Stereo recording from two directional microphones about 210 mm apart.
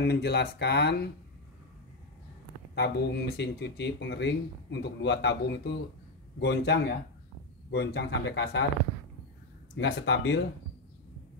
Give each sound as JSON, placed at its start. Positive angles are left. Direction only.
{"t": 0.0, "sound": "speech", "side_deg": 50}
{"t": 2.7, "sound": "speech", "side_deg": 55}
{"t": 9.8, "sound": "speech", "side_deg": 55}